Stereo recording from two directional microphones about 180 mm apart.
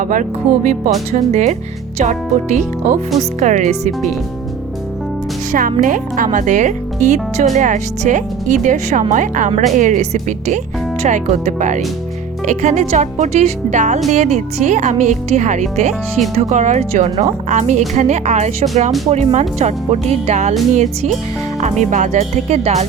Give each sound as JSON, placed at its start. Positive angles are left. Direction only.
{"t": 0.0, "sound": "speech", "side_deg": -45}
{"t": 5.5, "sound": "speech", "side_deg": -50}